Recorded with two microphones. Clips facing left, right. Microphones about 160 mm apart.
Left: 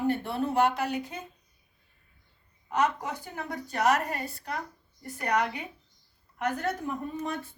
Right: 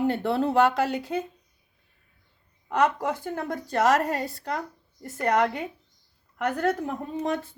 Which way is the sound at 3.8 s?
90° right.